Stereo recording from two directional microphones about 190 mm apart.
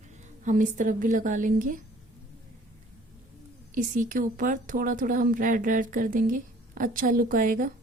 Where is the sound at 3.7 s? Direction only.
40° right (ahead or behind).